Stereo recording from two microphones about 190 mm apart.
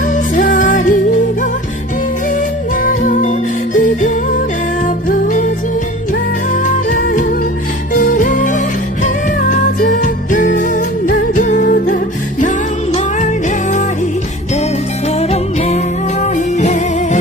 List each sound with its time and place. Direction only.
0.0 s music: 45° left (ahead or behind)
2.7 s music: 45° left (ahead or behind)
6.5 s music: 45° left (ahead or behind)
9.8 s music: 45° left (ahead or behind)
15.0 s music: 35° left (ahead or behind)